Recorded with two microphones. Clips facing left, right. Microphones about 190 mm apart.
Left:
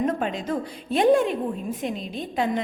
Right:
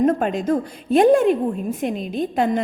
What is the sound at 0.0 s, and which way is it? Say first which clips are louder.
A woman's voice: right 7 dB; 45° right (ahead or behind).